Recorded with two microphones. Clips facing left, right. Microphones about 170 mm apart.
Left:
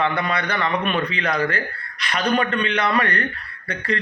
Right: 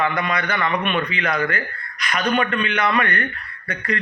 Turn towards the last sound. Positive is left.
turn(degrees=30)  # may be behind; listen again after turning